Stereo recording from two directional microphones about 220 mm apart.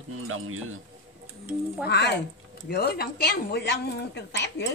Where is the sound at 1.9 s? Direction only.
50° left (ahead or behind).